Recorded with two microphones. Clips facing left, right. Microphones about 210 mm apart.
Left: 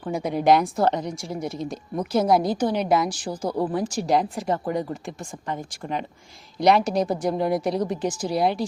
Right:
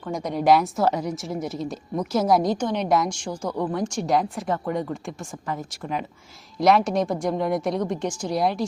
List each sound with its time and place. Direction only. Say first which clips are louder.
0.0 s a woman's voice: left 1 dB; 5° left (ahead or behind)
3.2 s speech: left 1 dB; 35° left (ahead or behind)
3.6 s a woman's voice: even; 5° left (ahead or behind)
5.8 s speech: even; 15° left (ahead or behind)
6.6 s a woman's voice: even; centre (ahead or behind)